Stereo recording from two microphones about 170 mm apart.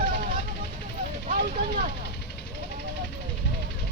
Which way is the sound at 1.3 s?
55° right (ahead or behind).